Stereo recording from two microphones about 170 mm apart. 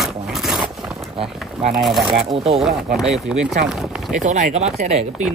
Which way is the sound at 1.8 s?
Centre (ahead or behind).